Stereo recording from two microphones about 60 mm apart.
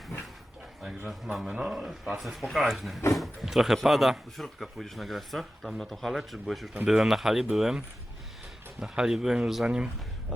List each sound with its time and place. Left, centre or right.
0.8 s speech: centre
9.6 s speech: centre